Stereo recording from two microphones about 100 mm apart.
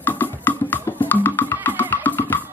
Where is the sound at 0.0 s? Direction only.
20° left (ahead or behind).